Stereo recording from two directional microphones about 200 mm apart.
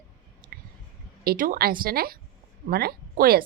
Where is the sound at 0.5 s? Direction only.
50° right (ahead or behind).